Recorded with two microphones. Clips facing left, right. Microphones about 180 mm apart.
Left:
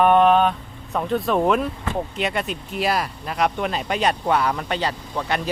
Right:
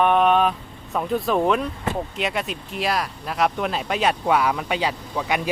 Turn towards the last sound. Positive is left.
turn(degrees=-10)  # may be behind; listen again after turning